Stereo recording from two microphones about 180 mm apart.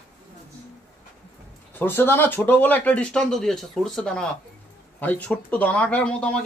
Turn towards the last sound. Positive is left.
turn(degrees=5)  # may be behind; listen again after turning